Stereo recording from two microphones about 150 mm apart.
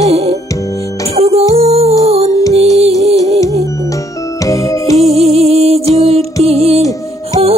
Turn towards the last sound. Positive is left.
turn(degrees=-40)  # may be behind; listen again after turning